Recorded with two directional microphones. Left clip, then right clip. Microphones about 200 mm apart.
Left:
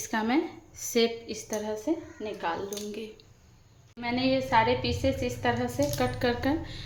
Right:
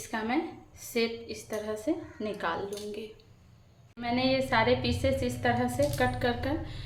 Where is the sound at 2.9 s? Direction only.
20° left (ahead or behind).